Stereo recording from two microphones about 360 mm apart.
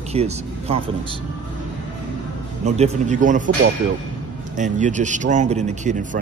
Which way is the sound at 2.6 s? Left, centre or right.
Centre.